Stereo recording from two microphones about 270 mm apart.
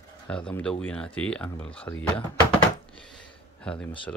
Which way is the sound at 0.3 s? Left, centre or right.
Centre.